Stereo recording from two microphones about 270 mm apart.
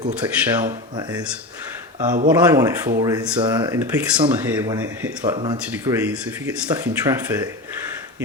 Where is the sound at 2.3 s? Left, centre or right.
Centre.